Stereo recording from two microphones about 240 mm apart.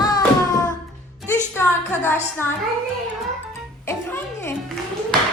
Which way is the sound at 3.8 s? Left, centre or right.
Centre.